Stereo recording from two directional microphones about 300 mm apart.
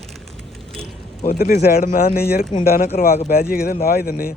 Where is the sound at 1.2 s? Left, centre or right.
Left.